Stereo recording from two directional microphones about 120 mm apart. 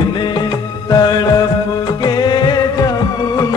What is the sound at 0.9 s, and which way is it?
Music, 35° left (ahead or behind).